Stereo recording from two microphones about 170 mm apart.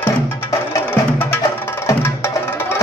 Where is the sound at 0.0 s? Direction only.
10° left (ahead or behind).